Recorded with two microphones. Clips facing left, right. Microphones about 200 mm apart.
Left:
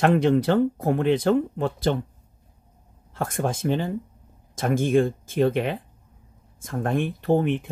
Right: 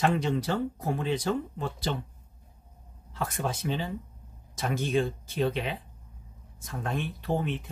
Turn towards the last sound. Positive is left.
turn(degrees=50)  # may be behind; listen again after turning